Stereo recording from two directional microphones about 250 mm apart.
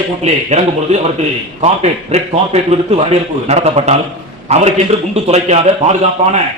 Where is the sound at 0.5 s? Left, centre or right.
Right.